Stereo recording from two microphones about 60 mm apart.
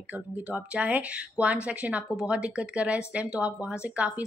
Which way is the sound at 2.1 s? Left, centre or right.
Centre.